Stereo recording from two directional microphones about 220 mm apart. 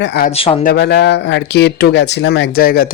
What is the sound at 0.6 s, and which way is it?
Speech, 50° left (ahead or behind).